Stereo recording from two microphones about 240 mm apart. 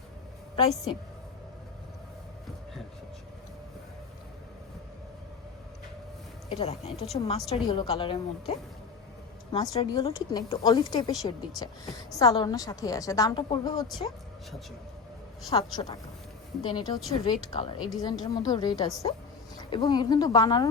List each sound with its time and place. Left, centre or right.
0.5 s a woman's voice: left
6.5 s a woman's voice: left
15.4 s a woman's voice: centre